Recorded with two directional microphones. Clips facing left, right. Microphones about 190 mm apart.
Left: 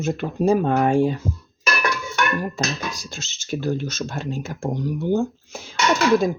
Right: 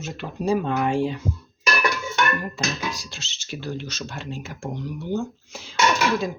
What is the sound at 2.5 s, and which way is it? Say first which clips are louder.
Speech: left 2 dB; 45° left (ahead or behind).